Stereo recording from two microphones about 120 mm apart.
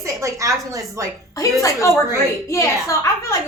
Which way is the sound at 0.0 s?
25° right (ahead or behind).